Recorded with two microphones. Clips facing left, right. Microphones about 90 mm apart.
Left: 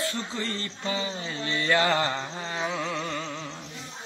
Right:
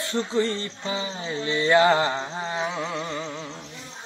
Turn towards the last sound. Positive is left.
turn(degrees=-10)  # may be behind; listen again after turning